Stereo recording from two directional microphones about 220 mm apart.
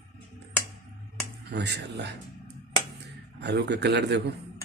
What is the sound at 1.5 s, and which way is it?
Speech, 50° right (ahead or behind).